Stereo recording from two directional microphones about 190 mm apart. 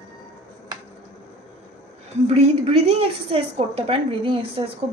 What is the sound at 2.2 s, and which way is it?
A woman's voice, 35° right (ahead or behind).